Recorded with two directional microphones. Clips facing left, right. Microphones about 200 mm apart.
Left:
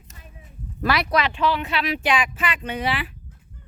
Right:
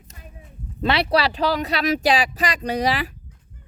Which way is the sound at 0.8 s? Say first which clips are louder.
Right 2 dB; 30° right (ahead or behind).